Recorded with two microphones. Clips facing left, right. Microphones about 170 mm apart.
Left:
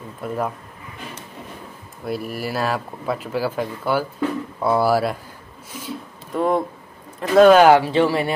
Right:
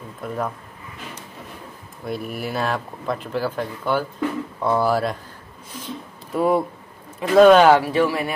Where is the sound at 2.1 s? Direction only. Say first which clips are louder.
Left 1 dB; 5° left (ahead or behind).